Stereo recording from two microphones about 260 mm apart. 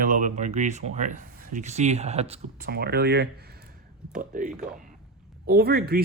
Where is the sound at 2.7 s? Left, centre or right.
Right.